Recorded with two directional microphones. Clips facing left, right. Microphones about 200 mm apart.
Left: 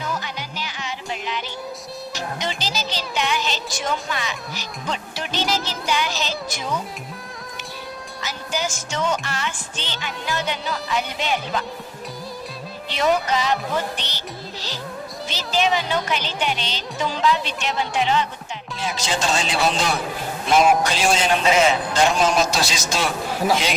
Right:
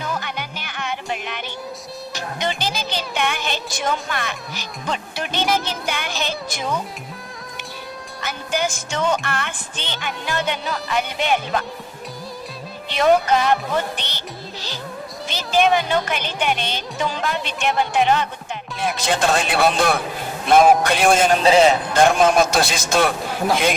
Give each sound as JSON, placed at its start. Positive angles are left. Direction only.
{"t": 0.1, "sound": "music", "side_deg": -55}
{"t": 4.1, "sound": "speech", "side_deg": -55}
{"t": 8.2, "sound": "speech", "side_deg": -55}
{"t": 12.9, "sound": "speech", "side_deg": -55}
{"t": 15.3, "sound": "music", "side_deg": -55}
{"t": 18.8, "sound": "speech", "side_deg": -55}
{"t": 20.8, "sound": "music", "side_deg": -55}
{"t": 21.9, "sound": "speech", "side_deg": -55}